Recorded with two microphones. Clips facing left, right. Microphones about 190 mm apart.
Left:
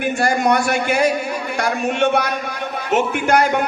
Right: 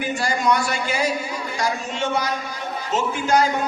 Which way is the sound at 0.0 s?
60° left (ahead or behind).